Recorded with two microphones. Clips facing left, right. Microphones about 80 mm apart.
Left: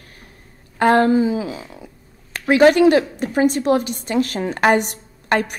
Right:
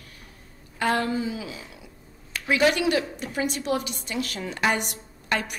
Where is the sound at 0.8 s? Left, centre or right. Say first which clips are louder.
Left 10 dB; left.